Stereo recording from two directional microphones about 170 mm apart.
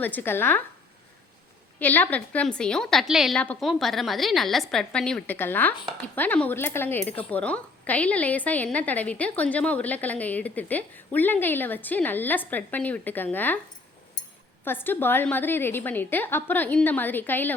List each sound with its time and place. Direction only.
0.0 s a woman's voice: 10° left (ahead or behind)
1.8 s a woman's voice: 10° left (ahead or behind)
14.6 s a woman's voice: 10° left (ahead or behind)